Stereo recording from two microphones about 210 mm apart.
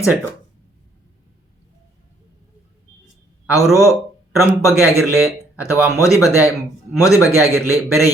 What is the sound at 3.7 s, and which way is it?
Speech, 15° left (ahead or behind).